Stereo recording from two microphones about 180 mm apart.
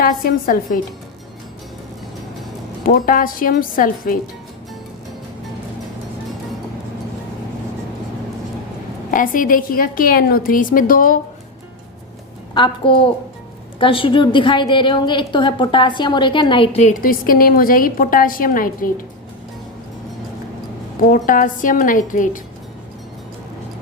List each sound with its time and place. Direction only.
0.0 s a woman's voice: 55° left (ahead or behind)
2.8 s a woman's voice: 50° left (ahead or behind)
9.1 s a woman's voice: 50° left (ahead or behind)
12.5 s a woman's voice: 25° left (ahead or behind); by 18.9 s 50° left (ahead or behind)
21.1 s a woman's voice: 50° left (ahead or behind)